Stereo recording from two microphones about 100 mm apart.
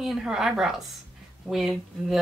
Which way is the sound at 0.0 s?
5° right (ahead or behind).